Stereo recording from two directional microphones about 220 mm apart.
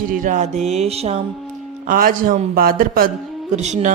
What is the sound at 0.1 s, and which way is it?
Speech, 35° right (ahead or behind).